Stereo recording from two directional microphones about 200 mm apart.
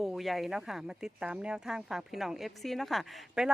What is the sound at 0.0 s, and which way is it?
Speech, centre (ahead or behind).